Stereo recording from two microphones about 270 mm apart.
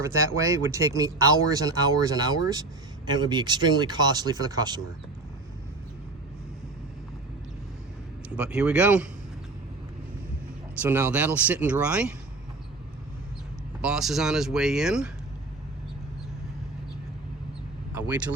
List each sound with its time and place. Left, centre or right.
0.0 s speech: centre
8.3 s speech: centre
10.8 s speech: centre
13.8 s speech: centre
18.0 s speech: centre